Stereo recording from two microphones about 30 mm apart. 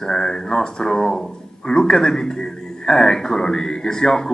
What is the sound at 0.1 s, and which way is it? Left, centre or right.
Speech, left.